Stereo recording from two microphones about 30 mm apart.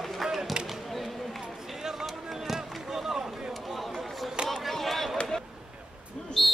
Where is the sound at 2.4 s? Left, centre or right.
Centre.